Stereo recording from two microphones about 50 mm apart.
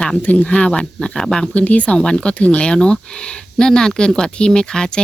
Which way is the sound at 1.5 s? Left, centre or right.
Left.